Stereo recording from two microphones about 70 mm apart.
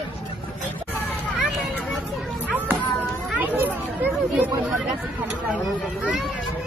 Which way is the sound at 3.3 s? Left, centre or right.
Right.